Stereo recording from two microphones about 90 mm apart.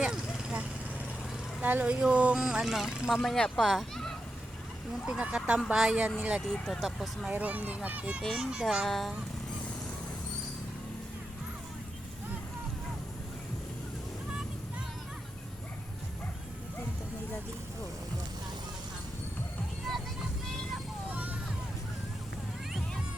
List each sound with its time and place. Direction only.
0.0 s vehicle: 10° right (ahead or behind)
1.6 s speech: 15° right (ahead or behind); by 4.2 s 5° left (ahead or behind)
5.0 s speech: 10° right (ahead or behind)
7.3 s speech: 15° right (ahead or behind)
8.2 s speech: 5° left (ahead or behind)
19.9 s vehicle: centre (ahead or behind)
21.1 s vehicle: 15° right (ahead or behind)